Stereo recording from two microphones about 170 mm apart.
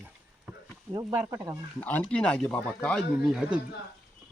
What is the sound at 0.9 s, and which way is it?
Speech, 15° right (ahead or behind).